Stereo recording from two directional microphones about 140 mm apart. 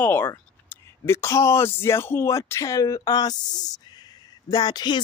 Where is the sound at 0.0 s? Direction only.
15° left (ahead or behind).